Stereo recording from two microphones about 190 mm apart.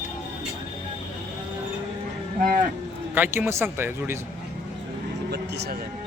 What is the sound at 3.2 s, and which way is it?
Speech, 10° right (ahead or behind).